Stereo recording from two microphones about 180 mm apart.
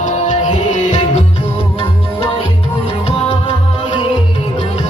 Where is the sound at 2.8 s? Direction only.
35° left (ahead or behind).